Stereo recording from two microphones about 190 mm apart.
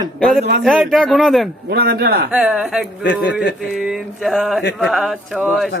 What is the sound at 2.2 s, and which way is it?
Speech, 5° right (ahead or behind).